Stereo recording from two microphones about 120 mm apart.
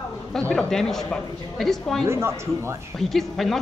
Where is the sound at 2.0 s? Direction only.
20° right (ahead or behind).